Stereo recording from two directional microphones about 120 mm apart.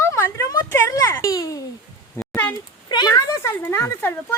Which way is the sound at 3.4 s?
25° left (ahead or behind).